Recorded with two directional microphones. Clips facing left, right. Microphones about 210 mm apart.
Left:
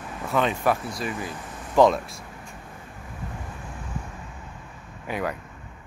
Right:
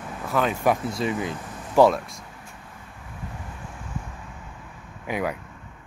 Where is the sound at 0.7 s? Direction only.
25° right (ahead or behind).